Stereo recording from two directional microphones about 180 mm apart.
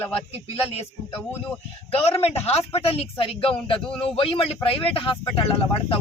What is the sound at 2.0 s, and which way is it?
Speech, 35° left (ahead or behind).